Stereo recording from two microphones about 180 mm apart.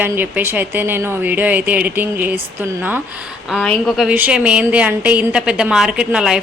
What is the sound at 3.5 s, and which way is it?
A woman's voice, centre (ahead or behind).